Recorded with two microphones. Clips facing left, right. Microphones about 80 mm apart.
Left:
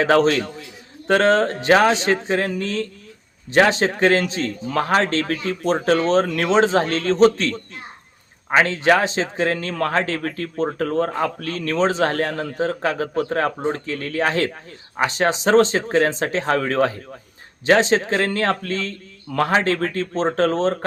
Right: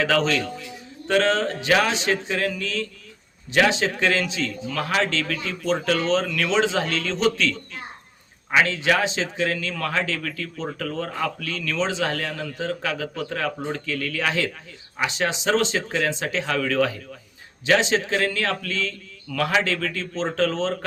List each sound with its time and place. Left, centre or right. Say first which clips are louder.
0.0 s speech: left 5 dB; left